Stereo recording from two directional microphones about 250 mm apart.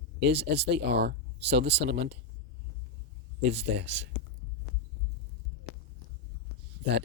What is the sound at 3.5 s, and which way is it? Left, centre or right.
Speech, right.